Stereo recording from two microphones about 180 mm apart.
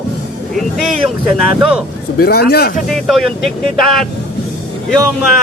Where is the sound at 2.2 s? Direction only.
60° left (ahead or behind).